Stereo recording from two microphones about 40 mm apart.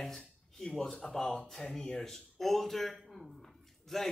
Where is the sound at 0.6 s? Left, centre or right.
Centre.